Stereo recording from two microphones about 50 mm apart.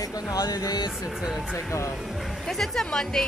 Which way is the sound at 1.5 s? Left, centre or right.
Left.